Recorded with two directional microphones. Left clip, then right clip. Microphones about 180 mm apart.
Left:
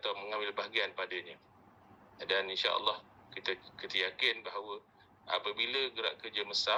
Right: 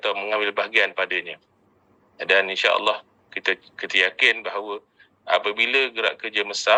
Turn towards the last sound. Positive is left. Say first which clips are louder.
# right 12 dB
turn(degrees=-45)  # may be behind; listen again after turning